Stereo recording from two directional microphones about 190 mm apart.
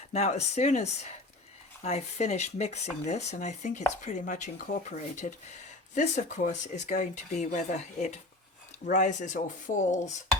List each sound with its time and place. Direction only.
0.1 s speech: 35° left (ahead or behind)